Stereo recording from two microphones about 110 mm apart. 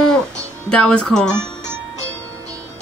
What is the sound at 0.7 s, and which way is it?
Speech, 10° left (ahead or behind).